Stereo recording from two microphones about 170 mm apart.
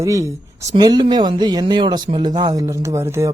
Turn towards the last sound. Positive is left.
turn(degrees=-15)  # may be behind; listen again after turning